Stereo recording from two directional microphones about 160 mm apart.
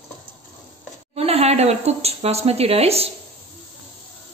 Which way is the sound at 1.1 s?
40° right (ahead or behind).